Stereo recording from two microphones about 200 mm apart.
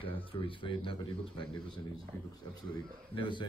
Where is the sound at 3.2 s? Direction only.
25° left (ahead or behind).